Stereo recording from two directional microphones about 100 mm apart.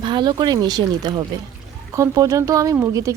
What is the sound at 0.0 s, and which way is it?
Speech, 50° right (ahead or behind).